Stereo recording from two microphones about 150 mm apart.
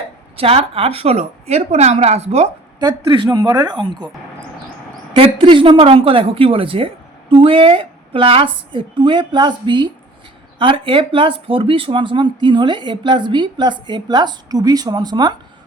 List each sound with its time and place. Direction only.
0.3 s a woman's voice: 40° right (ahead or behind)
2.7 s a woman's voice: 30° right (ahead or behind)
5.1 s speech: 35° right (ahead or behind)